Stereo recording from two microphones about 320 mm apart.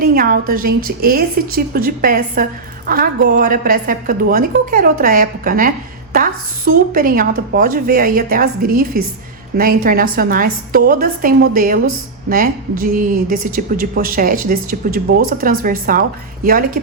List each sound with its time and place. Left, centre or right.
0.0 s a woman's voice: right